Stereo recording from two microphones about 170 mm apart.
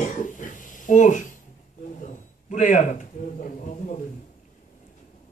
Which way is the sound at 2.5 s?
45° left (ahead or behind).